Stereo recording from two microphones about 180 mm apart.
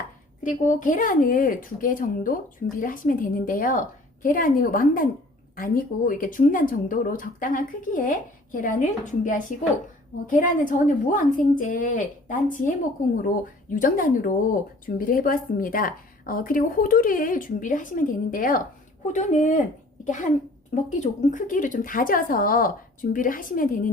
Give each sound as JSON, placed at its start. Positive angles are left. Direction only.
{"t": 0.4, "sound": "speech", "side_deg": 45}